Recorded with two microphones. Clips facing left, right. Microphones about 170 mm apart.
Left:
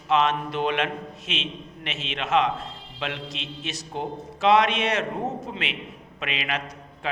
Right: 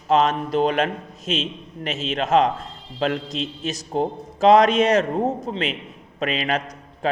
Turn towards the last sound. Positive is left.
turn(degrees=-40)  # may be behind; listen again after turning